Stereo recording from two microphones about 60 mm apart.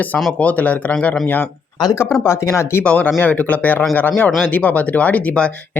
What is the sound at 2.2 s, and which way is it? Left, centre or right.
Speech, left.